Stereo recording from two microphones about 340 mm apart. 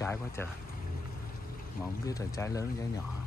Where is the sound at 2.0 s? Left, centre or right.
Centre.